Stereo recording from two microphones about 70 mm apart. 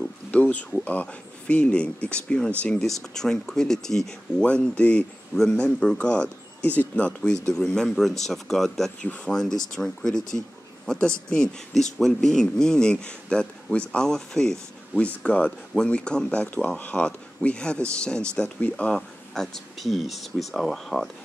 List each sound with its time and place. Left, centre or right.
0.3 s speech: left; by 8.9 s centre
9.0 s speech: centre
9.3 s speech: centre
15.0 s speech: centre